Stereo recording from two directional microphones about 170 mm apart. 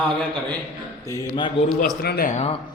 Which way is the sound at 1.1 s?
25° left (ahead or behind).